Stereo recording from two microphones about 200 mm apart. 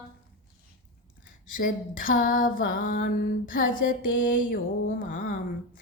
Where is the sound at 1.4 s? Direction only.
45° left (ahead or behind).